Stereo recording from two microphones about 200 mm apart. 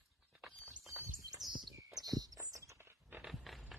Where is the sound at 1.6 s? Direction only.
20° right (ahead or behind).